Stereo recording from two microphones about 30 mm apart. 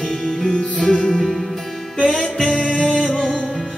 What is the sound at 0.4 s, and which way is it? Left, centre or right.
Music, left.